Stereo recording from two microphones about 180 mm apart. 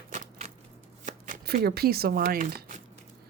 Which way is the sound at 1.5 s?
60° right (ahead or behind).